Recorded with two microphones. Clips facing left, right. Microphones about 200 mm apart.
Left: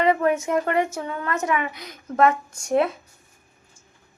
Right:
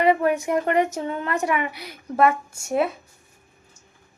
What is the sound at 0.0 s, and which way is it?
A woman's voice, 10° right (ahead or behind).